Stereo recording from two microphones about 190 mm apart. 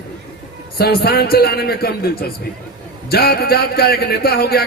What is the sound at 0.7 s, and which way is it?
A man's voice, 55° left (ahead or behind).